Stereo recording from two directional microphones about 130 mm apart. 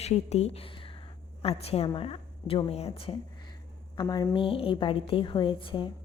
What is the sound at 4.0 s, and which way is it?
A woman's voice, 35° left (ahead or behind).